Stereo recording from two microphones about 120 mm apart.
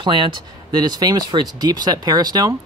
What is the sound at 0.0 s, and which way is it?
Speech, 40° right (ahead or behind).